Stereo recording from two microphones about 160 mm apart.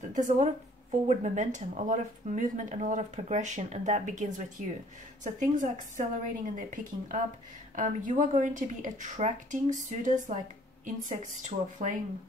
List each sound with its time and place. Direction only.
0.1 s speech: 50° right (ahead or behind)